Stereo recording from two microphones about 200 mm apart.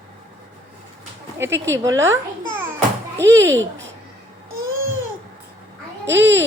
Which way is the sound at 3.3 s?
70° right (ahead or behind).